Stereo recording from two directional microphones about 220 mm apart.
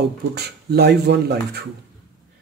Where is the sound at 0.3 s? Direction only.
45° right (ahead or behind).